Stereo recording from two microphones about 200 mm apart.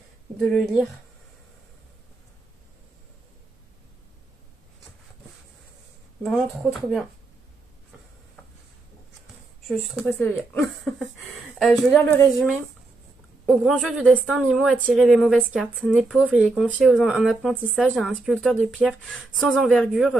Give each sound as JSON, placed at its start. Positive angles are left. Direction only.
{"t": 0.4, "sound": "a woman's voice", "side_deg": 0}
{"t": 6.2, "sound": "a woman's voice", "side_deg": 0}
{"t": 10.2, "sound": "speech", "side_deg": 10}
{"t": 10.8, "sound": "a woman's voice", "side_deg": 0}